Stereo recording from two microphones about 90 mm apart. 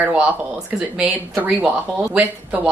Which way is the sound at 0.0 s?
15° right (ahead or behind).